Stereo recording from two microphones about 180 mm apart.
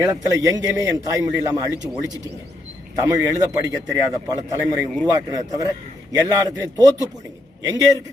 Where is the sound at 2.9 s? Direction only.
20° right (ahead or behind).